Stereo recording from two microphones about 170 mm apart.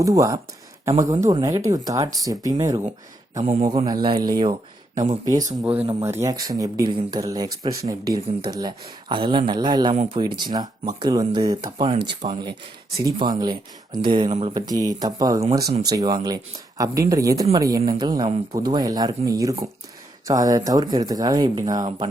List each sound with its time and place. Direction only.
0.0 s a man's voice: 20° right (ahead or behind)
14.3 s speech: 40° right (ahead or behind)
14.5 s speech: 20° right (ahead or behind)